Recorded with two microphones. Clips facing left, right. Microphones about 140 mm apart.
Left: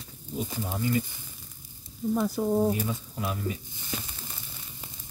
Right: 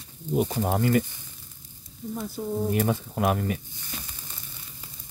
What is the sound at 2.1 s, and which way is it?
Speech, 90° left.